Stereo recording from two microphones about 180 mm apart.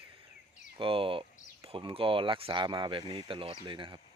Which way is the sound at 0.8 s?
30° right (ahead or behind).